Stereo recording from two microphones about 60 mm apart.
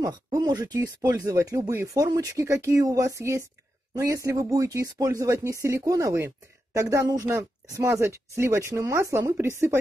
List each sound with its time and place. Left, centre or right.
0.0 s speech: right
1.7 s speech: right
2.1 s speech: right
2.4 s speech: right
3.9 s speech: right
7.2 s speech: right